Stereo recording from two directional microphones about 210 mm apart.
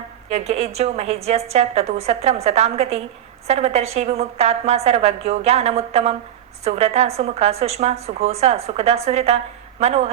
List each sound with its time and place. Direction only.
0.3 s a woman's voice: 30° right (ahead or behind)